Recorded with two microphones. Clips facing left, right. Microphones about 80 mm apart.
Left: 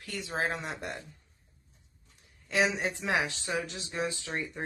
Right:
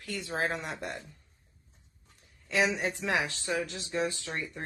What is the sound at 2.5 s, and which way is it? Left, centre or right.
Speech, left.